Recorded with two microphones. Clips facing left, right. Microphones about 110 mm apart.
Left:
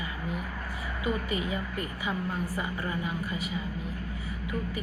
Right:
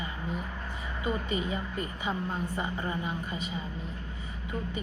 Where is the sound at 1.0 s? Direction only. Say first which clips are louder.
Even; 30° right (ahead or behind).